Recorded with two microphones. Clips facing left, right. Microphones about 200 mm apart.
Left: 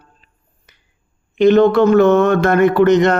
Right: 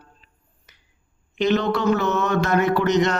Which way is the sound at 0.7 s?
50° left (ahead or behind).